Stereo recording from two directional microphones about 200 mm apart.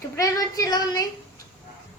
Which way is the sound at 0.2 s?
15° left (ahead or behind).